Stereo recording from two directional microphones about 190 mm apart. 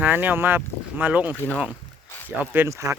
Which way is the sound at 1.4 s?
10° left (ahead or behind).